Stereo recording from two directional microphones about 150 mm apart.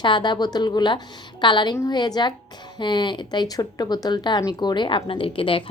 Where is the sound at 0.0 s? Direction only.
30° left (ahead or behind).